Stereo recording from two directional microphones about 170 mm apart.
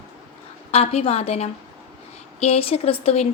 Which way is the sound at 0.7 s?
35° left (ahead or behind).